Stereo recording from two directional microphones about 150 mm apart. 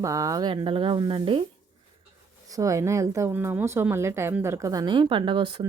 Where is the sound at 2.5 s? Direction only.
20° right (ahead or behind).